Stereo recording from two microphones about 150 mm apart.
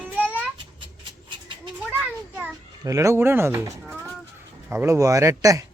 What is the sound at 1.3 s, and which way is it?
Cat, 35° right (ahead or behind).